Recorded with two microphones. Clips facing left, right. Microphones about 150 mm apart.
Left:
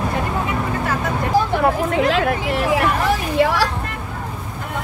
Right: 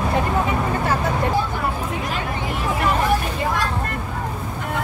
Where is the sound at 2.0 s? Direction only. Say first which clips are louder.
Left 8 dB; 80° left.